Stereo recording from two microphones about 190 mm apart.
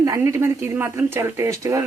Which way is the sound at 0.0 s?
15° right (ahead or behind).